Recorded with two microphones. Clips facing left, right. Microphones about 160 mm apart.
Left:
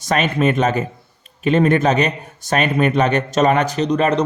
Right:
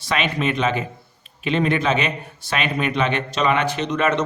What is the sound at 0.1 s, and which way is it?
A man's voice, 45° left (ahead or behind).